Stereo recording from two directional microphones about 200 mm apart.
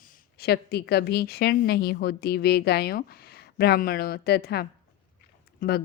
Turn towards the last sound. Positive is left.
turn(degrees=50)  # may be behind; listen again after turning